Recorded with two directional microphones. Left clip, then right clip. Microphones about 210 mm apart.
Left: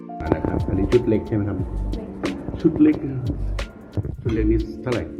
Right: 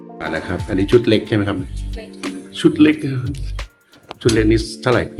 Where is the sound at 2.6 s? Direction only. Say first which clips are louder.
Right 5 dB; 25° right (ahead or behind).